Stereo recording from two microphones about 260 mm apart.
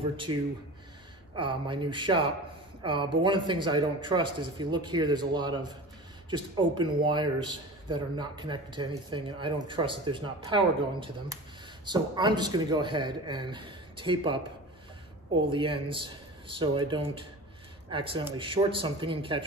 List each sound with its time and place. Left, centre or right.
0.3 s speech: centre
15.5 s speech: centre